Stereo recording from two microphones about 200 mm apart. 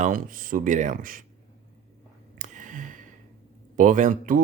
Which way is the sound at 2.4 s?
40° right (ahead or behind).